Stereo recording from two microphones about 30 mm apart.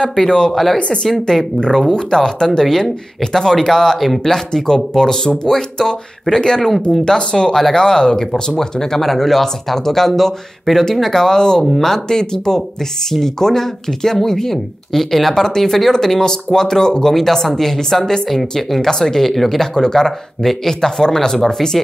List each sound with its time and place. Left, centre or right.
0.5 s speech: centre
1.7 s speech: centre
8.5 s speech: centre
11.6 s speech: centre
11.9 s speech: left; by 19.7 s centre
19.7 s speech: centre